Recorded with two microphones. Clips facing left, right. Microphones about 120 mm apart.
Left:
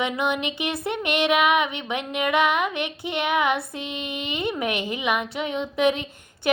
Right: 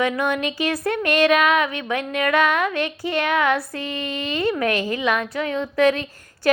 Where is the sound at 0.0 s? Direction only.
20° left (ahead or behind).